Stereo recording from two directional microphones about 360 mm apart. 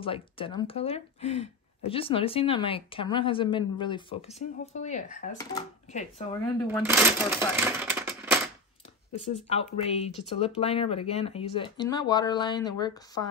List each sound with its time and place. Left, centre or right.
0.0 s speech: centre
6.9 s speech: centre
7.5 s a sound: centre
9.3 s speech: centre